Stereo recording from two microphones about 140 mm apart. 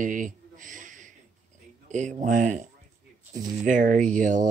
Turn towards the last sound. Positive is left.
turn(degrees=-65)  # may be behind; listen again after turning